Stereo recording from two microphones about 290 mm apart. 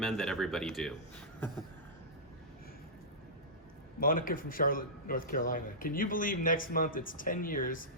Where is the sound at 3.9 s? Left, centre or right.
Left.